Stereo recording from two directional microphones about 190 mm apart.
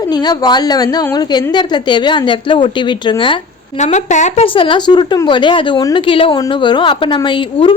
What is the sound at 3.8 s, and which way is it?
Speech, 40° left (ahead or behind).